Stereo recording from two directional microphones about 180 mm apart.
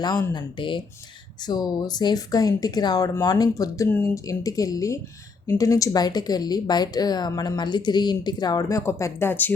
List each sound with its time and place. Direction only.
0.0 s speech: 20° left (ahead or behind)